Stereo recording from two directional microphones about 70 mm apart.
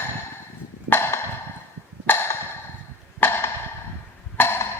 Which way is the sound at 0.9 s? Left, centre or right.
Left.